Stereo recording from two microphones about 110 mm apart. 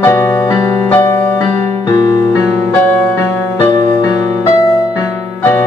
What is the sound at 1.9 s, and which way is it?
Music, 35° left (ahead or behind).